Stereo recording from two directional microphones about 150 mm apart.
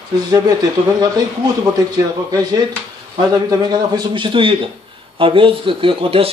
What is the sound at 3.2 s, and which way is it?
A man's voice, 25° right (ahead or behind).